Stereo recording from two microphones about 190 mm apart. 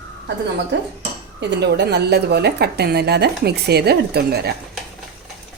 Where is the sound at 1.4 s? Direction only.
60° right (ahead or behind).